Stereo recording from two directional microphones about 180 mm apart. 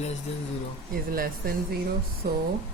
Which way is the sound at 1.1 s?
55° right (ahead or behind).